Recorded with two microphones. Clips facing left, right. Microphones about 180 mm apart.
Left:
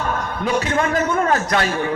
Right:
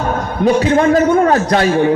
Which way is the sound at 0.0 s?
35° right (ahead or behind).